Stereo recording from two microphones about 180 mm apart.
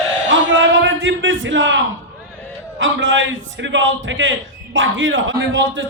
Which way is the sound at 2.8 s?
90° right.